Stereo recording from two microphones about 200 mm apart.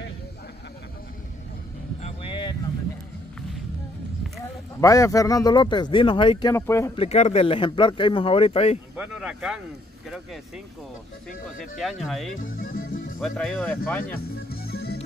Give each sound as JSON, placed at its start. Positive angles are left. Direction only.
{"t": 2.0, "sound": "a sound", "side_deg": 30}
{"t": 4.7, "sound": "speech", "side_deg": 15}
{"t": 6.5, "sound": "speech", "side_deg": 15}
{"t": 7.0, "sound": "speech", "side_deg": 35}
{"t": 8.9, "sound": "speech", "side_deg": -5}
{"t": 11.8, "sound": "speech", "side_deg": 0}
{"t": 12.4, "sound": "speech", "side_deg": 40}
{"t": 13.2, "sound": "speech", "side_deg": 5}
{"t": 14.1, "sound": "music", "side_deg": 50}